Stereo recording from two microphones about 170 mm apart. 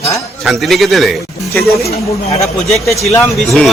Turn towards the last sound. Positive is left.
turn(degrees=0)  # may be behind; listen again after turning